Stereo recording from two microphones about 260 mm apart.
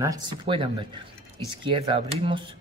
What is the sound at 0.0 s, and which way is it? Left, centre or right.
Speech, centre.